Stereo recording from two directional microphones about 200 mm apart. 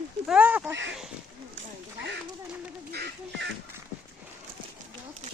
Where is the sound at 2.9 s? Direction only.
55° right (ahead or behind).